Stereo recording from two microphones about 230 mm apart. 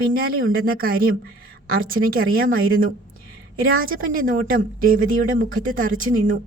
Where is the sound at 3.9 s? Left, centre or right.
Right.